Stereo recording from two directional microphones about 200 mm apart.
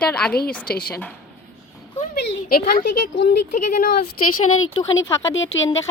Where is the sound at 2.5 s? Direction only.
50° left (ahead or behind).